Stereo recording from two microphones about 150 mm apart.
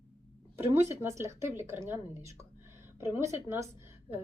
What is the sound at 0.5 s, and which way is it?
A woman's voice, 15° right (ahead or behind).